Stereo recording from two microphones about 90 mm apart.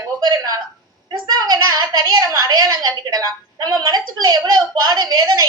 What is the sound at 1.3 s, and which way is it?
A woman's voice, 50° right (ahead or behind).